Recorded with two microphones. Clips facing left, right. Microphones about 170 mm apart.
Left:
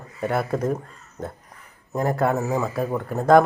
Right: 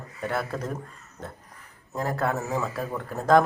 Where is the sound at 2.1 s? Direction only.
10° left (ahead or behind).